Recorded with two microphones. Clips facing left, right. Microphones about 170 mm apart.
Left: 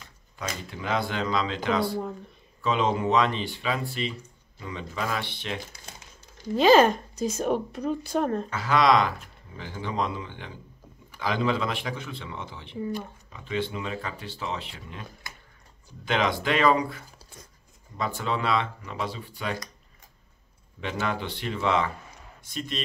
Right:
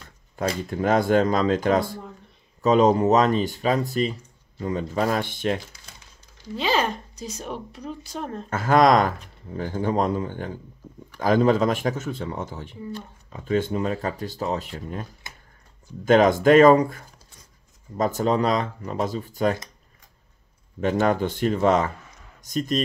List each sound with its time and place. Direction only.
0.7 s speech: 45° right (ahead or behind)
6.5 s speech: 45° left (ahead or behind)
8.5 s speech: 50° right (ahead or behind)
16.1 s speech: 45° right (ahead or behind)
20.8 s speech: 45° right (ahead or behind)